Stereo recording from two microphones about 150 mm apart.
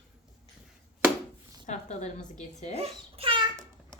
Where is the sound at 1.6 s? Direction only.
50° left (ahead or behind).